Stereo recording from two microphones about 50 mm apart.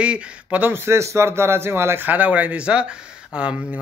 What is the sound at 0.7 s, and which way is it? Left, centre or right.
Speech, right.